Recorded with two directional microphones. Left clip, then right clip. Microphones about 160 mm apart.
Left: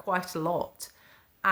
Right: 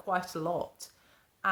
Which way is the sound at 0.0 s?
20° left (ahead or behind).